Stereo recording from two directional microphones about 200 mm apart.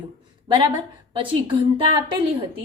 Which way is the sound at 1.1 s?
25° right (ahead or behind).